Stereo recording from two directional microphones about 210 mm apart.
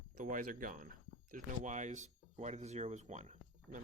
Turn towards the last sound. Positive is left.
turn(degrees=-35)  # may be behind; listen again after turning